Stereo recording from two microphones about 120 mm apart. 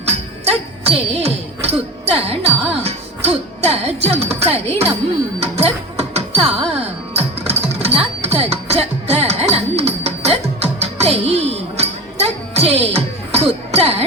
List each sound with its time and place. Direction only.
0.4 s music: 55° right (ahead or behind)
2.1 s speech: 55° right (ahead or behind)
5.4 s music: 60° right (ahead or behind)